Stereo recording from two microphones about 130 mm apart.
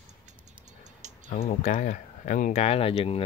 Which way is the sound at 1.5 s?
75° left (ahead or behind).